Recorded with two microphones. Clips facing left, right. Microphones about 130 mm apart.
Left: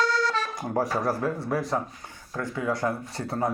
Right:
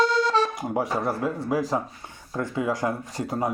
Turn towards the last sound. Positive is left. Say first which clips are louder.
# right 1 dB
turn(degrees=-15)  # may be behind; listen again after turning